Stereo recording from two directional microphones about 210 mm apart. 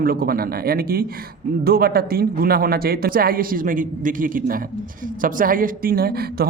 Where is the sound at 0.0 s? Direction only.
45° right (ahead or behind).